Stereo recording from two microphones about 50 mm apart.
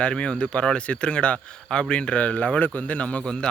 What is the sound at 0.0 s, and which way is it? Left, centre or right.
Speech, left.